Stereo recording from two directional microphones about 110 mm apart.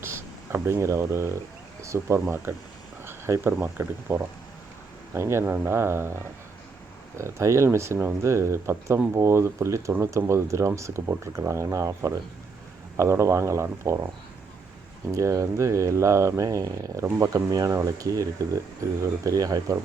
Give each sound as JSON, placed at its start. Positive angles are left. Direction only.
{"t": 0.0, "sound": "speech", "side_deg": -20}
{"t": 7.2, "sound": "speech", "side_deg": -25}
{"t": 15.1, "sound": "speech", "side_deg": -30}